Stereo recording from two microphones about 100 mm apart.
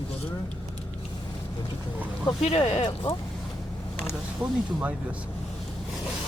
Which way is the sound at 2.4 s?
90° left.